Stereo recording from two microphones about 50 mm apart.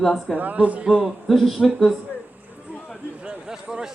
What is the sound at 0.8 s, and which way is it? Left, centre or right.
Speech, centre.